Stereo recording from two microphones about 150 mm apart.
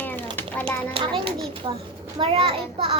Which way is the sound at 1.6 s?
30° right (ahead or behind).